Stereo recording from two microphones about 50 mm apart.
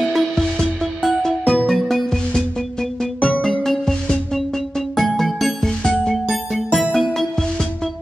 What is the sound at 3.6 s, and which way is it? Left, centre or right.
Music, centre.